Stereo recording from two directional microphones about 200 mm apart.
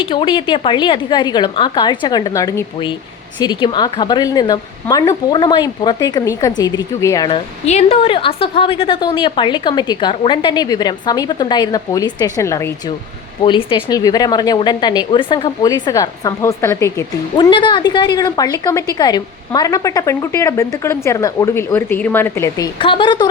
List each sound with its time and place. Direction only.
0.0 s a woman's voice: 25° left (ahead or behind)
7.3 s a woman's voice: 30° left (ahead or behind); by 12.7 s 15° left (ahead or behind)
13.4 s a woman's voice: 25° left (ahead or behind)